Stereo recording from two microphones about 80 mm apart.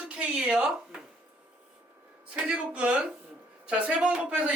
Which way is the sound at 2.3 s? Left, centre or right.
Centre.